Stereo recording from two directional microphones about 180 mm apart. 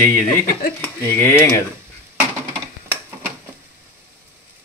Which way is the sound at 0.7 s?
10° left (ahead or behind).